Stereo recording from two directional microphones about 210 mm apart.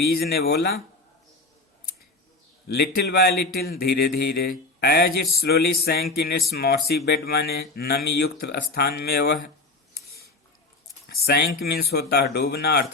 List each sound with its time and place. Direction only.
0.0 s speech: 50° left (ahead or behind)
2.6 s speech: 50° left (ahead or behind)
9.9 s a sound: 50° left (ahead or behind)
11.3 s speech: 45° left (ahead or behind)